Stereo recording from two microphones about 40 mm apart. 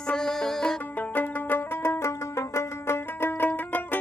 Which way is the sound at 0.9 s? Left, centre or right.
Left.